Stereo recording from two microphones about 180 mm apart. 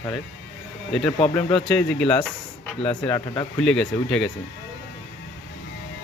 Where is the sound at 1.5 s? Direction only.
5° left (ahead or behind).